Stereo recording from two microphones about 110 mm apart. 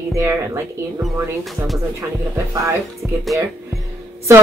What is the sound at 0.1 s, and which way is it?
Speech, 30° right (ahead or behind).